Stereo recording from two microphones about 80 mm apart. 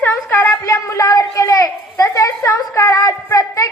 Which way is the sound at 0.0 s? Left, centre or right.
Left.